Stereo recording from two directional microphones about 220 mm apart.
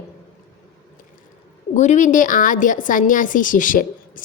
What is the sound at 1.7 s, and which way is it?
A woman's voice, 35° left (ahead or behind).